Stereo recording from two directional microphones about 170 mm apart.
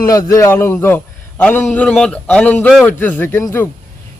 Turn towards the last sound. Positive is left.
turn(degrees=15)  # may be behind; listen again after turning